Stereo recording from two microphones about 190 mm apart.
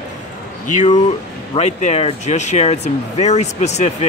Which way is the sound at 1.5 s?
35° left (ahead or behind).